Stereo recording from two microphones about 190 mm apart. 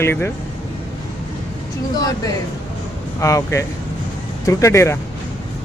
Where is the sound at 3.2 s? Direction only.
15° left (ahead or behind).